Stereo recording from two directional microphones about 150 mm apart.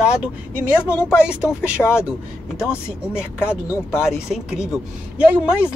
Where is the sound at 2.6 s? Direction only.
5° right (ahead or behind).